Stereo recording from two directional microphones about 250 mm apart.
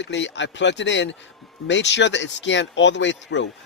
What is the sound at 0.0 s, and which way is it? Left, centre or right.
A man's voice, left.